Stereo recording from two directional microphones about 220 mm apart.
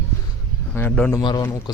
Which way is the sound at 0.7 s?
10° left (ahead or behind).